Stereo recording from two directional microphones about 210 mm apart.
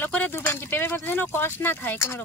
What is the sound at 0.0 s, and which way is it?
Speech, 10° left (ahead or behind).